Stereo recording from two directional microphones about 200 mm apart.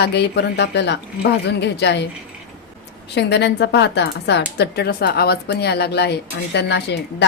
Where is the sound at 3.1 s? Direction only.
60° left (ahead or behind).